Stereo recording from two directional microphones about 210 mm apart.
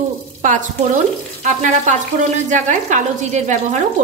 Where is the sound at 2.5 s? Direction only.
35° right (ahead or behind).